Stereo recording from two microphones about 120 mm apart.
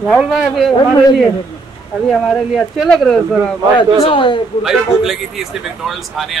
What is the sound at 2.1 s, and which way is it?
A man's voice, centre (ahead or behind).